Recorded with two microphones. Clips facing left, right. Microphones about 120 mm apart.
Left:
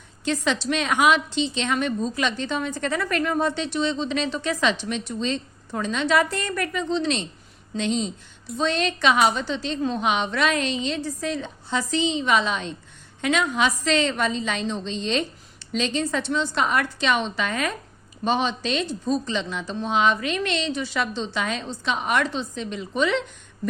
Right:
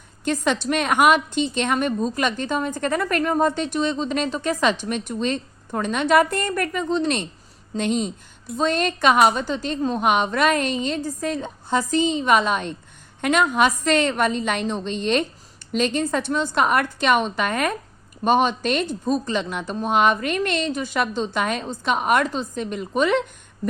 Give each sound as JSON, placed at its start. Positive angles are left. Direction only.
{"t": 0.3, "sound": "a woman's voice", "side_deg": -50}